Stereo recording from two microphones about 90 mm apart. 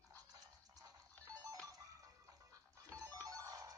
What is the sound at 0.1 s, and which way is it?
Music, 40° right (ahead or behind).